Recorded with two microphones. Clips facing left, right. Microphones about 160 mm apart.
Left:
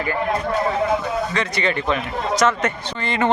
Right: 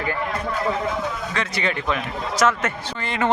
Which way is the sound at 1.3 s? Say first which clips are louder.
Left 3 dB; 5° right (ahead or behind).